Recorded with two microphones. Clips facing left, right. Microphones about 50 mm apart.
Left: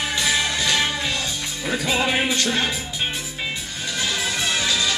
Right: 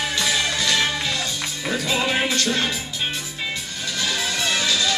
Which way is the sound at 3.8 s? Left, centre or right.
Centre.